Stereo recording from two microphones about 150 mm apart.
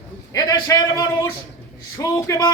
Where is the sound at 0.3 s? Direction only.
25° left (ahead or behind).